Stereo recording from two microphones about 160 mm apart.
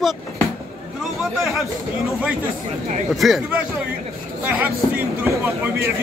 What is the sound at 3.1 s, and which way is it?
Speech, centre (ahead or behind).